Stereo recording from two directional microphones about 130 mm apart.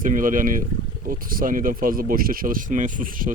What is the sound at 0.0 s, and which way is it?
Speech, 90° right.